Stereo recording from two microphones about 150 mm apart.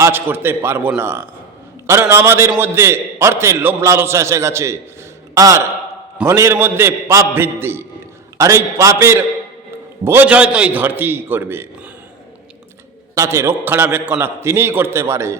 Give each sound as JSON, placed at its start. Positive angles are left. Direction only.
{"t": 0.0, "sound": "a man's voice", "side_deg": -15}
{"t": 13.1, "sound": "a man's voice", "side_deg": -20}